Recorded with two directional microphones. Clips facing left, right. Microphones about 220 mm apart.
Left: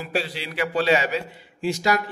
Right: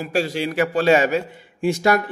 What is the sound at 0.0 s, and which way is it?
A man's voice, 45° right (ahead or behind).